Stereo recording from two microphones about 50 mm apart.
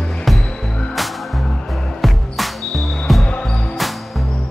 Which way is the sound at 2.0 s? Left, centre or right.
Centre.